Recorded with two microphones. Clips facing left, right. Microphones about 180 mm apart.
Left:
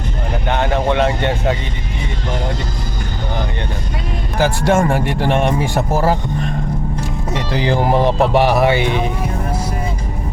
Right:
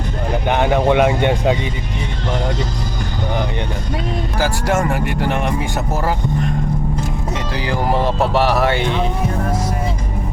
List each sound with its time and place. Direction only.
0.4 s speech: 15° right (ahead or behind)
4.4 s speech: 25° left (ahead or behind)
7.5 s speech: 25° left (ahead or behind)